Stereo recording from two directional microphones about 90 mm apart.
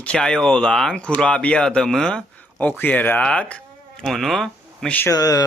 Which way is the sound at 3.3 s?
15° left (ahead or behind).